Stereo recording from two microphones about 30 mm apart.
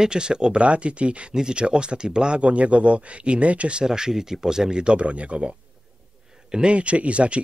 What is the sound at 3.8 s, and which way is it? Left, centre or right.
Speech, right.